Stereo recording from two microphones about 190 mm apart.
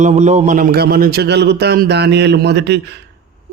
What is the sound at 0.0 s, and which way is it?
A man's voice, 35° right (ahead or behind).